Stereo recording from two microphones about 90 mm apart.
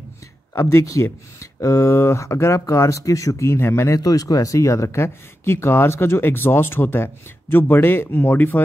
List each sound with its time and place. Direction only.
0.6 s speech: 30° left (ahead or behind)